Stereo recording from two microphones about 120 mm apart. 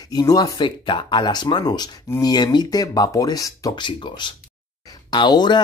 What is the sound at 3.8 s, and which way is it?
Speech, 40° left (ahead or behind).